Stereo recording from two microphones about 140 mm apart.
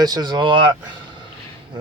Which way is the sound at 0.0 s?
30° right (ahead or behind).